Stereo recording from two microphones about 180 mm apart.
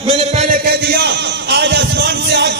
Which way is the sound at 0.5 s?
60° right (ahead or behind).